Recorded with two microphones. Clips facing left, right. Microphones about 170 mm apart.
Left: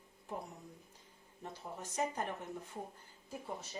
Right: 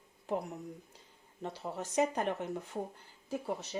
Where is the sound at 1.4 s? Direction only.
90° right.